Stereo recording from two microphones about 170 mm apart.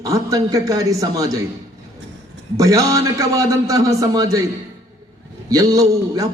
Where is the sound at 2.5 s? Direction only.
20° right (ahead or behind).